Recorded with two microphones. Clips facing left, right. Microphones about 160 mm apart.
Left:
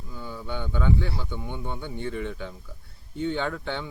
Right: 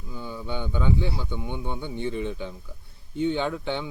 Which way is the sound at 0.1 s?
20° right (ahead or behind).